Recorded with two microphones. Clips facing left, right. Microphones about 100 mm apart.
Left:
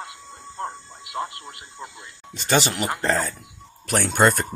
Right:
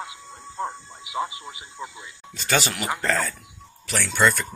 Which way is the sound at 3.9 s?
50° left (ahead or behind).